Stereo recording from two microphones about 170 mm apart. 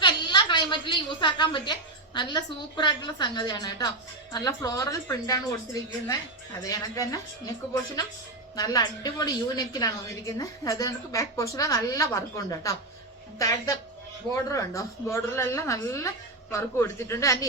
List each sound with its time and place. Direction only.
0.0 s a woman's voice: 25° left (ahead or behind)
6.7 s a woman's voice: 20° left (ahead or behind)
8.5 s a woman's voice: 20° left (ahead or behind)